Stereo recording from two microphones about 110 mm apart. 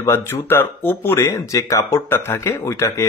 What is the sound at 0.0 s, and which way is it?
Speech, 25° left (ahead or behind).